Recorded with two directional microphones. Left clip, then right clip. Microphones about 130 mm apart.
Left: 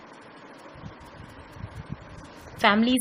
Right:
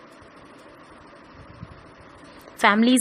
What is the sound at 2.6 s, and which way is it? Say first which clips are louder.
Speech: right 3 dB; 40° right (ahead or behind).